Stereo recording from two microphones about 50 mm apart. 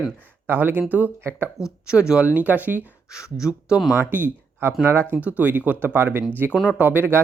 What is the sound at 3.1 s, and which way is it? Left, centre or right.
Speech, centre.